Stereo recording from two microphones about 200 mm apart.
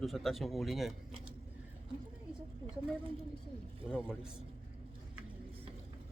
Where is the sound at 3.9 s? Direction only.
5° left (ahead or behind).